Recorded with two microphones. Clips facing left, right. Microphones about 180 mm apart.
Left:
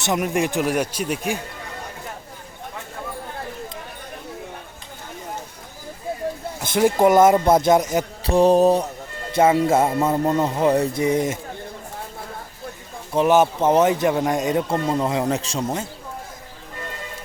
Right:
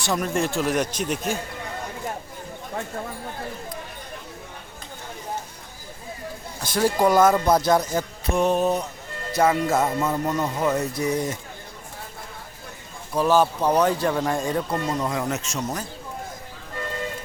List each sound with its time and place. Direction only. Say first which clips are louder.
0.0 s speech: left 3 dB; 20° left (ahead or behind)
6.6 s speech: left 4 dB; 20° left (ahead or behind)
8.3 s mantra: left 6 dB; 35° left (ahead or behind)
9.3 s speech: left 4 dB; 25° left (ahead or behind)
13.1 s speech: left 3 dB; 20° left (ahead or behind)